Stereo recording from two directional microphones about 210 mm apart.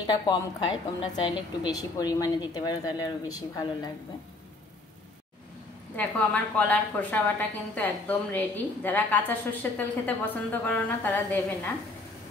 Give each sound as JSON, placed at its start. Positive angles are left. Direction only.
{"t": 0.0, "sound": "a woman's voice", "side_deg": 20}
{"t": 5.9, "sound": "a woman's voice", "side_deg": 5}